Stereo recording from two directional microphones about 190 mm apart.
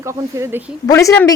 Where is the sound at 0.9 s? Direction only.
15° left (ahead or behind).